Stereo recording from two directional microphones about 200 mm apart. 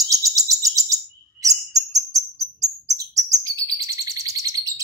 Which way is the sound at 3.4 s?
15° right (ahead or behind).